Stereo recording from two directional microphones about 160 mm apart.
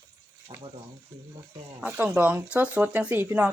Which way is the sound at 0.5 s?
35° right (ahead or behind).